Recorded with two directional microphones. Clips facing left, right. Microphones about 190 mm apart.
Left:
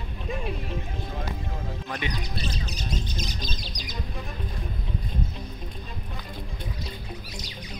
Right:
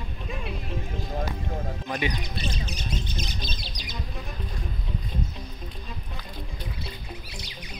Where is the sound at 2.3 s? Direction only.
35° left (ahead or behind).